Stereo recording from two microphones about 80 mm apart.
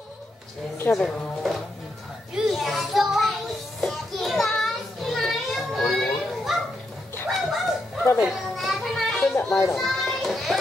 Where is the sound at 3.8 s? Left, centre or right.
Centre.